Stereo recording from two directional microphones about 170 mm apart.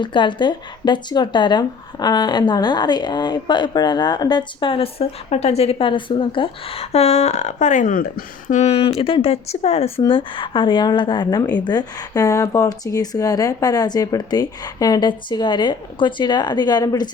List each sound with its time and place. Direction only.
0.0 s speech: 25° left (ahead or behind)